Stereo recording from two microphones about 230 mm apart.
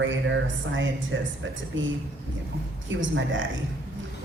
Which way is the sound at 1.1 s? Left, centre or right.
Right.